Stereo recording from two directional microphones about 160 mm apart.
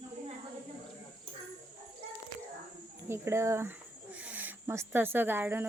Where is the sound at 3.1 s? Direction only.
15° right (ahead or behind).